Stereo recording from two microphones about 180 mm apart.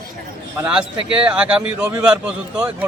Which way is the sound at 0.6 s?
5° right (ahead or behind).